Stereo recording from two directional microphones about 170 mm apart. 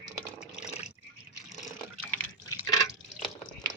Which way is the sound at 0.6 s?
40° left (ahead or behind).